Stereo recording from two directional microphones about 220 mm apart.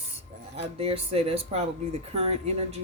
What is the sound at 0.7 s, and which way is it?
Speech, 25° right (ahead or behind).